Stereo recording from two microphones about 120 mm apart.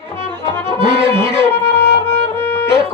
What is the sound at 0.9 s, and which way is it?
Music, 20° left (ahead or behind).